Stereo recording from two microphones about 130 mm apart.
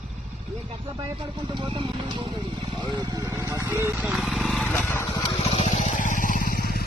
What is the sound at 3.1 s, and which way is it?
Speech, 25° right (ahead or behind).